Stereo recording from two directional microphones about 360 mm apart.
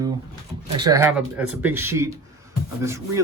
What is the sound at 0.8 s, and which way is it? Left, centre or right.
Speech, centre.